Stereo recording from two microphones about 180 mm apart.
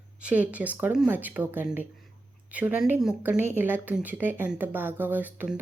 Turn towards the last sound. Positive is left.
turn(degrees=-10)  # may be behind; listen again after turning